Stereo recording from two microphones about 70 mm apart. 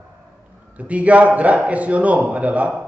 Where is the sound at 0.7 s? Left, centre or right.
Centre.